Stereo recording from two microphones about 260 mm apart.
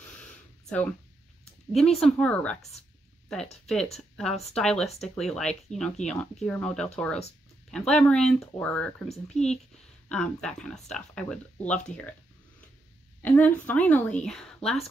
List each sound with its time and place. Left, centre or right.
0.0 s a sound: centre
1.7 s speech: centre
3.6 s speech: centre
9.3 s a child's voice: left
10.0 s speech: centre
13.2 s a woman's voice: centre